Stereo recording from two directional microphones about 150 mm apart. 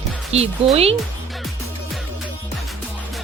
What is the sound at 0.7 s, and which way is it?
Speech, 40° right (ahead or behind).